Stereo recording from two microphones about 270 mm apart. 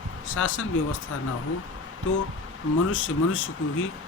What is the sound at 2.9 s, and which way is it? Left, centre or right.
Speech, left.